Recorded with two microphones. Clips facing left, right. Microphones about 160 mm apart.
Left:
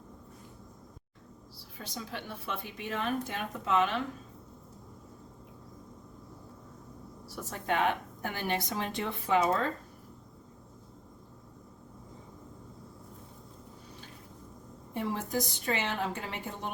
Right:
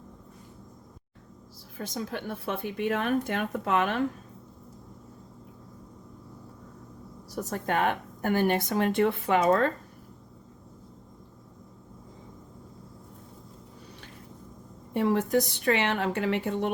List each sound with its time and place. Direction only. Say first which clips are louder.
1.8 s speech: right 7 dB; 50° right (ahead or behind)
7.3 s a woman's voice: right 3 dB; 40° right (ahead or behind); by 9.7 s 60° right (ahead or behind)
14.9 s a woman's voice: right 8 dB; 65° right (ahead or behind)